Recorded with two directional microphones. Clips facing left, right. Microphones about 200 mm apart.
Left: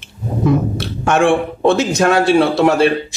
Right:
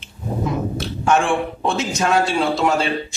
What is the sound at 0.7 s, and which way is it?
A man's voice, 65° left (ahead or behind).